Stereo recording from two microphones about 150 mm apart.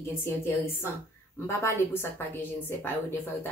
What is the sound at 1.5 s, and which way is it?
A woman's voice, 15° left (ahead or behind).